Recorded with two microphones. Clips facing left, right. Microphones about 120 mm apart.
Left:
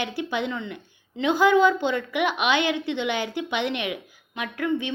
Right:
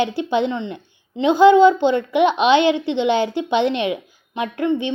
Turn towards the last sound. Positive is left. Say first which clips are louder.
# right 6 dB
turn(degrees=-25)  # may be behind; listen again after turning